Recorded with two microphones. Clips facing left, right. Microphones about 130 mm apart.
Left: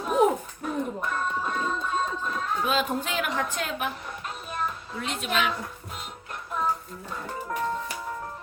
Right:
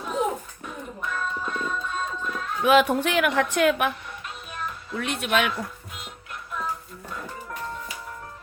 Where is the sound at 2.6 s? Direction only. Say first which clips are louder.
Right 11 dB; 75° right (ahead or behind).